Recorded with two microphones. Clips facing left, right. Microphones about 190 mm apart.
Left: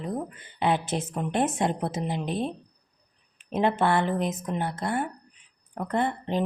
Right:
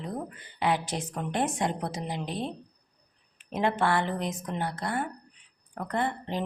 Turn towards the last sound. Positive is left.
turn(degrees=20)  # may be behind; listen again after turning